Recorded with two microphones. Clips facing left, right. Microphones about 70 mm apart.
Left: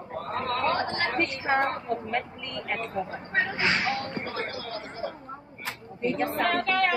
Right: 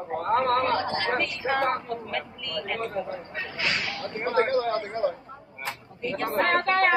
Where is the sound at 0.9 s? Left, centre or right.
Left.